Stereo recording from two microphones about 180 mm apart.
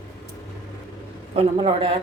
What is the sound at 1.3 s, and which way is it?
Speech, 30° right (ahead or behind).